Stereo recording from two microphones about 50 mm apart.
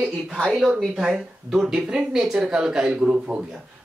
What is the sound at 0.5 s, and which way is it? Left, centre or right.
Speech, centre.